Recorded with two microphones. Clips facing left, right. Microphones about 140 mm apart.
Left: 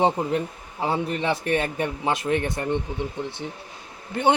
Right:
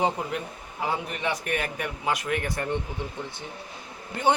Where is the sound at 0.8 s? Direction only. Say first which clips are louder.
Left 5 dB; 30° left (ahead or behind).